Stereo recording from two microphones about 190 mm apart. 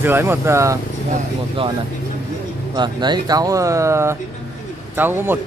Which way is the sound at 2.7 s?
25° right (ahead or behind).